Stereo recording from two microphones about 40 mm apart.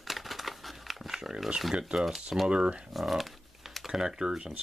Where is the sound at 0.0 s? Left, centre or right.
Centre.